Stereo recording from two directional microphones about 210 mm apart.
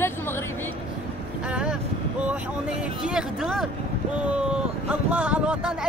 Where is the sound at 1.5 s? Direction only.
5° right (ahead or behind).